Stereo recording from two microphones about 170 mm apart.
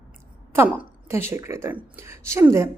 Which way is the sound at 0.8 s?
15° right (ahead or behind).